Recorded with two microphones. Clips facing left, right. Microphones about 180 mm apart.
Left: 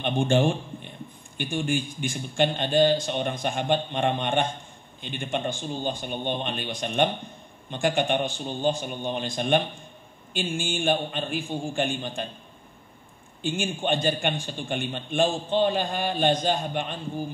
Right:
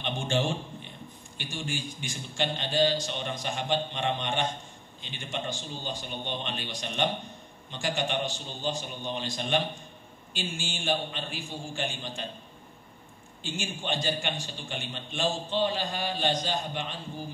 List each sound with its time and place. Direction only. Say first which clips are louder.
0.0 s a man's voice: left 7 dB; 55° left (ahead or behind)
13.4 s a man's voice: left 7 dB; 55° left (ahead or behind)